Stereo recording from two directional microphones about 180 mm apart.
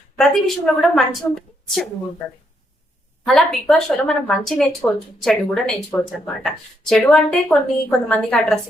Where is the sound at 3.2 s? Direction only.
Centre (ahead or behind).